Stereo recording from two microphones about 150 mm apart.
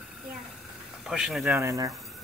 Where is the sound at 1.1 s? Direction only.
Centre (ahead or behind).